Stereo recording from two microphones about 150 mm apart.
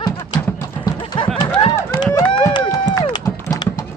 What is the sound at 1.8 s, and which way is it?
Run, 15° left (ahead or behind).